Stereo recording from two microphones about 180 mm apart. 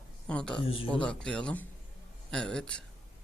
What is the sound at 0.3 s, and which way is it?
Speech, 5° left (ahead or behind).